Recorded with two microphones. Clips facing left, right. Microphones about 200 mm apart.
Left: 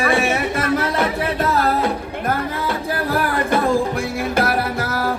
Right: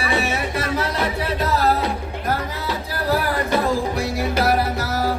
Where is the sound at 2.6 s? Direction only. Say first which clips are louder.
Right 1 dB; 55° left (ahead or behind).